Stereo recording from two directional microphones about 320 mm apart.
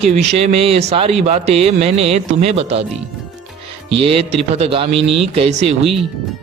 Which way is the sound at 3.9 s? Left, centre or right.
Centre.